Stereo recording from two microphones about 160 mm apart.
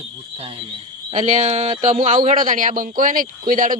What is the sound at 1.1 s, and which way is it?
Speech, 50° right (ahead or behind).